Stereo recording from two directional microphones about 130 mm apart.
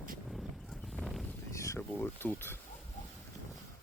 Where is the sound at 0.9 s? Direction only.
Centre (ahead or behind).